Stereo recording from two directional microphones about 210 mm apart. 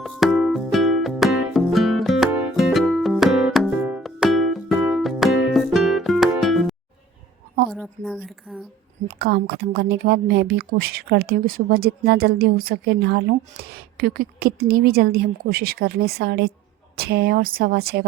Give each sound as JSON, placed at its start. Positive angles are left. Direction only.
{"t": 0.0, "sound": "music", "side_deg": 0}
{"t": 7.7, "sound": "a woman's voice", "side_deg": 0}
{"t": 9.0, "sound": "a woman's voice", "side_deg": -45}